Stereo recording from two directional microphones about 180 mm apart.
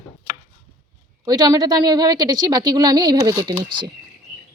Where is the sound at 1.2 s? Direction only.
20° right (ahead or behind).